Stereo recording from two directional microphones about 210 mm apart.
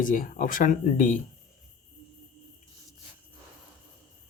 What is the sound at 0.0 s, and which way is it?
Speech, 40° left (ahead or behind).